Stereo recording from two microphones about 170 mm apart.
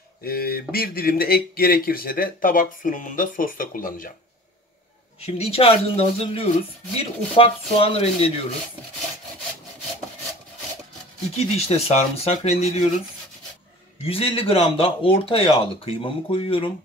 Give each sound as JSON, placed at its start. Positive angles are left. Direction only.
{"t": 0.2, "sound": "speech", "side_deg": 65}
{"t": 5.2, "sound": "speech", "side_deg": 35}
{"t": 11.3, "sound": "speech", "side_deg": 40}
{"t": 14.0, "sound": "speech", "side_deg": 35}